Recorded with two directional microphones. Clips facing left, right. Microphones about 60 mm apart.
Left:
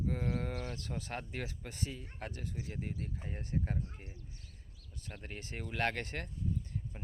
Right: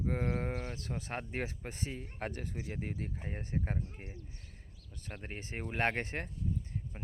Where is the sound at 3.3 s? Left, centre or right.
Right.